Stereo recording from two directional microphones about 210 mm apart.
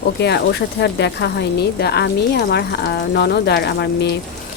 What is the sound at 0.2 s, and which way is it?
Speech, 55° left (ahead or behind).